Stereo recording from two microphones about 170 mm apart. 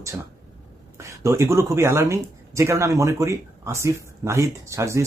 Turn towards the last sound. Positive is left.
turn(degrees=-15)  # may be behind; listen again after turning